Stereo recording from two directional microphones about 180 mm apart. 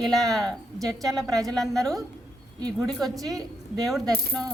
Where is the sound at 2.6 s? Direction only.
20° right (ahead or behind).